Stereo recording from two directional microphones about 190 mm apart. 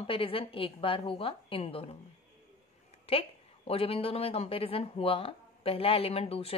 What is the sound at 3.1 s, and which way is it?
A woman's voice, 30° left (ahead or behind).